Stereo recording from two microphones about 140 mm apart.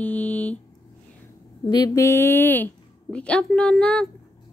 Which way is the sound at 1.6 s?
30° left (ahead or behind).